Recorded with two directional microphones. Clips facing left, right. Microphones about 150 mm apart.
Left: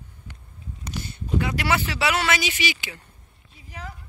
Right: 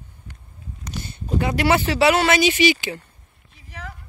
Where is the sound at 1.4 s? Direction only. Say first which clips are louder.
Right 7 dB; 25° right (ahead or behind).